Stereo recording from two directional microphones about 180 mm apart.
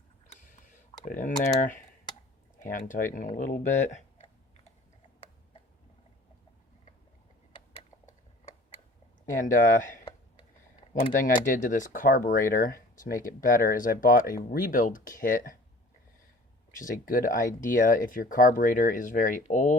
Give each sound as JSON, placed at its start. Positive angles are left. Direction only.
{"t": 1.0, "sound": "speech", "side_deg": 45}
{"t": 9.4, "sound": "speech", "side_deg": 45}
{"t": 11.1, "sound": "speech", "side_deg": 50}
{"t": 16.7, "sound": "speech", "side_deg": 50}